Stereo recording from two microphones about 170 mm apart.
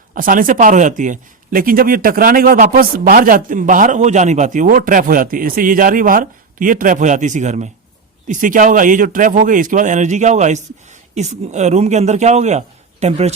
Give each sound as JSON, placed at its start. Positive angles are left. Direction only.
{"t": 0.1, "sound": "a man's voice", "side_deg": -55}